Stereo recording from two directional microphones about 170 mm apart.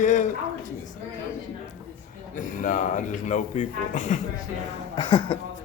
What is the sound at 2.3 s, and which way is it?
Speech, 50° left (ahead or behind).